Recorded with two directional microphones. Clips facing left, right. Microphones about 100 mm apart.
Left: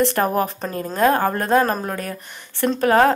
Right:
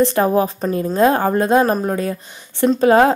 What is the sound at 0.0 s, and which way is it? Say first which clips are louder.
Speech: right 4 dB; 15° right (ahead or behind).